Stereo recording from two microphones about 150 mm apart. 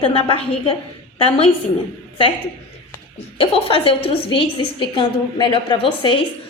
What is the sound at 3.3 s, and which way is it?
A woman's voice, 40° left (ahead or behind).